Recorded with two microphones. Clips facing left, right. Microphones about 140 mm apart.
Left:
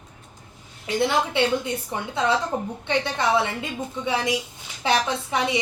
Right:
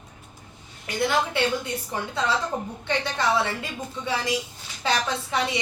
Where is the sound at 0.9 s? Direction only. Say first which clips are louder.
Left 2 dB; 25° left (ahead or behind).